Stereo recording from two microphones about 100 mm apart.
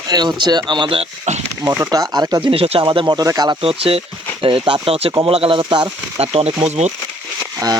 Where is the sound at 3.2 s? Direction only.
40° right (ahead or behind).